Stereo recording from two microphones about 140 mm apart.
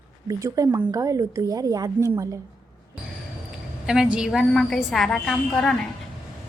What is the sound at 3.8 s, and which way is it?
A woman's voice, 5° right (ahead or behind).